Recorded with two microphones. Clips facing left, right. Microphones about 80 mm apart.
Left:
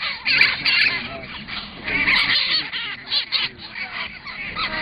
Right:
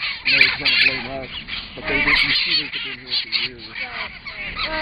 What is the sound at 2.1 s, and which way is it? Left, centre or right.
Dog, left.